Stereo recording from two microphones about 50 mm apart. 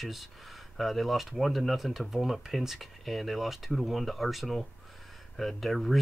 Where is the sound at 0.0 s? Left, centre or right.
Centre.